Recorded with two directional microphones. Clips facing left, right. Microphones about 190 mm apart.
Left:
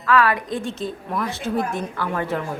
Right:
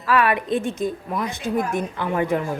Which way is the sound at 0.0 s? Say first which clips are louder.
Left 1 dB; 25° right (ahead or behind).